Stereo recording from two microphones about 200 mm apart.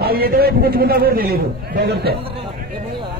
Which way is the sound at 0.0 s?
50° right (ahead or behind).